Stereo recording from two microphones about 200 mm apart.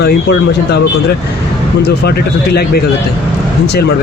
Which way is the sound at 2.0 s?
50° left (ahead or behind).